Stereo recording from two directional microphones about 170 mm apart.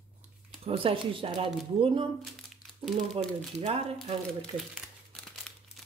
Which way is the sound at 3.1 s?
35° right (ahead or behind).